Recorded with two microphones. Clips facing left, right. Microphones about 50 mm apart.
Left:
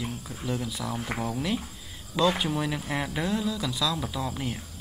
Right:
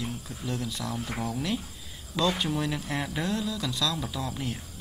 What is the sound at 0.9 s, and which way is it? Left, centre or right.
Speech, left.